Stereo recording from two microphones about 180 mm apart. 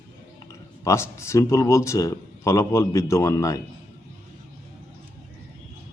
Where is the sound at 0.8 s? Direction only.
15° left (ahead or behind).